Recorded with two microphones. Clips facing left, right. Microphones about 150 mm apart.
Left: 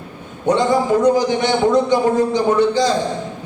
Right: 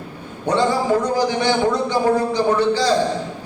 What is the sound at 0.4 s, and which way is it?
A man's voice, 20° left (ahead or behind).